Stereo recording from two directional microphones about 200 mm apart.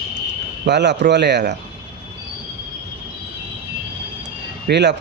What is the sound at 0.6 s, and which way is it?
Speech, 60° right (ahead or behind).